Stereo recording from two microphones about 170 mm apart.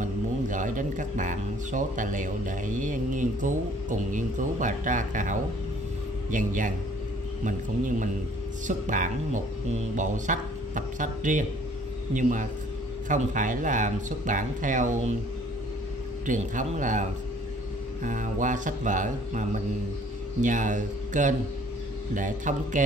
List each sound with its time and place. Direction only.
0.0 s speech: 50° right (ahead or behind)
16.3 s speech: 50° right (ahead or behind)